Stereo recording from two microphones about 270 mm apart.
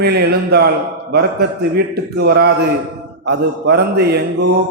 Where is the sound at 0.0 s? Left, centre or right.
Right.